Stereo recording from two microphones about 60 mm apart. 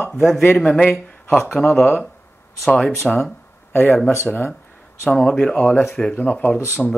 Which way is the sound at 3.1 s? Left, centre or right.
Centre.